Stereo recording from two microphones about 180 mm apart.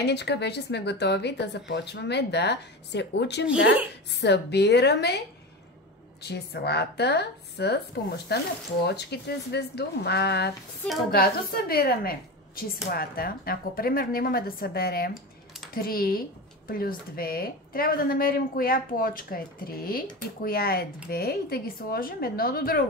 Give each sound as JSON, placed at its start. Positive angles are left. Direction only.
{"t": 0.0, "sound": "speech", "side_deg": 70}
{"t": 6.2, "sound": "a woman's voice", "side_deg": 65}